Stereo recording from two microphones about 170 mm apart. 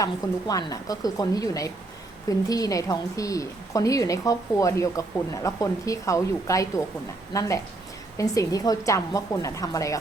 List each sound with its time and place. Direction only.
0.0 s a woman's voice: 20° left (ahead or behind)